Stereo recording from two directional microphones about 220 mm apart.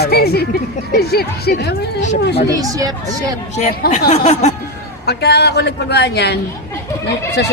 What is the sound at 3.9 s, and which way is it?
Speech, 30° left (ahead or behind).